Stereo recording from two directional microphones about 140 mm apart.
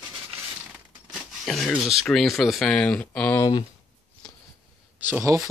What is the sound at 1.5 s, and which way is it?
Speech, centre (ahead or behind).